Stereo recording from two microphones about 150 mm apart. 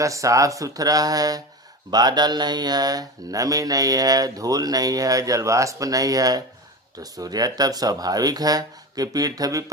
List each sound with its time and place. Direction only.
0.0 s speech: 20° right (ahead or behind)